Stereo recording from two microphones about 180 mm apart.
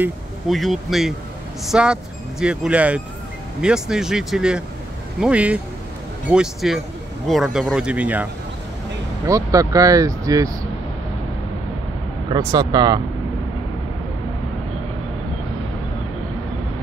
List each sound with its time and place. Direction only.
0.5 s speech: centre (ahead or behind)
9.2 s speech: 20° right (ahead or behind)
12.3 s speech: 20° right (ahead or behind)